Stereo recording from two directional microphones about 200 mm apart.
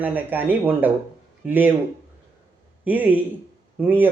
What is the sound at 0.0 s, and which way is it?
Speech, 10° right (ahead or behind).